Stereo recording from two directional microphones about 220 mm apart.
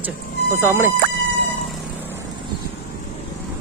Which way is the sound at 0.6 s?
10° right (ahead or behind).